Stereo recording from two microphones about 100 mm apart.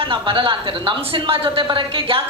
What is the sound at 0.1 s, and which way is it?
A man's voice, 60° right (ahead or behind).